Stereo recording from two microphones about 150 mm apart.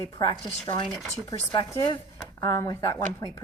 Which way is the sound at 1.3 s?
35° left (ahead or behind).